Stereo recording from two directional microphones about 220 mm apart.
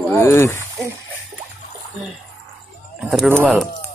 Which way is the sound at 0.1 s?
10° left (ahead or behind).